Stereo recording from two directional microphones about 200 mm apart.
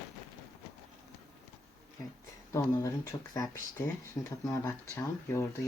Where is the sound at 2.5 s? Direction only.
15° left (ahead or behind).